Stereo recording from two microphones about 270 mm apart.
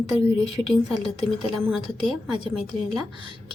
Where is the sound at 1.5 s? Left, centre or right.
Centre.